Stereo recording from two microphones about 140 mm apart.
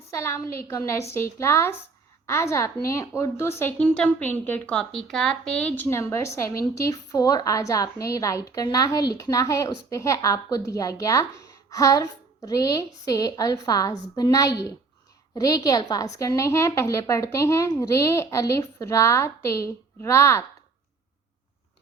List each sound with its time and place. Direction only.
0.1 s a woman's voice: 15° left (ahead or behind)